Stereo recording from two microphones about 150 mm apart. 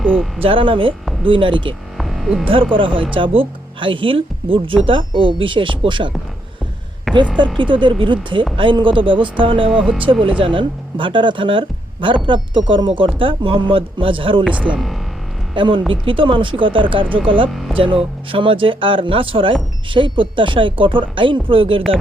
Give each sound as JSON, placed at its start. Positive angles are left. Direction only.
{"t": 0.0, "sound": "speech", "side_deg": 5}
{"t": 0.4, "sound": "speech", "side_deg": -35}
{"t": 2.0, "sound": "hum", "side_deg": 0}
{"t": 2.4, "sound": "speech", "side_deg": -35}
{"t": 7.1, "sound": "a sound", "side_deg": 0}
{"t": 7.6, "sound": "speech", "side_deg": -35}
{"t": 9.7, "sound": "speech", "side_deg": -5}
{"t": 10.1, "sound": "speech", "side_deg": -35}
{"t": 14.5, "sound": "speech", "side_deg": -10}
{"t": 15.5, "sound": "speech", "side_deg": -35}